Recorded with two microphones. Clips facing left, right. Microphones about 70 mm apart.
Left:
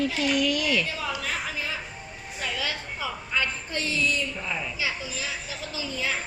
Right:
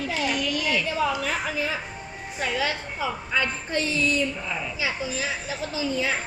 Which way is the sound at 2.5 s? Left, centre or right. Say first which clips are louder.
Right 5 dB; right.